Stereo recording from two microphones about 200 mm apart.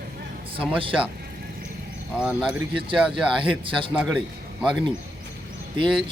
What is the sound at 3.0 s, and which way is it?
Speech, centre (ahead or behind).